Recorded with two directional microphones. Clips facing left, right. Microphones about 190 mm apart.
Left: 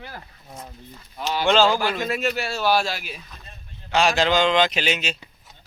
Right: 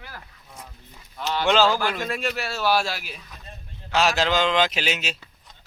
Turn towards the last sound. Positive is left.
turn(degrees=-5)  # may be behind; listen again after turning